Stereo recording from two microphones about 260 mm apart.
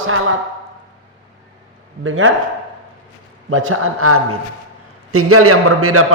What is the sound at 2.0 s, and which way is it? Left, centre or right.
Speech, right.